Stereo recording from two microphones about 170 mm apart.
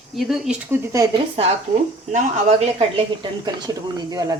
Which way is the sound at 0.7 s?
20° right (ahead or behind).